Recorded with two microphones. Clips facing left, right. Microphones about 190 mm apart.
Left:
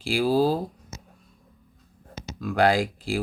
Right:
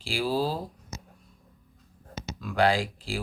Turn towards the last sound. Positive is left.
turn(degrees=40)  # may be behind; listen again after turning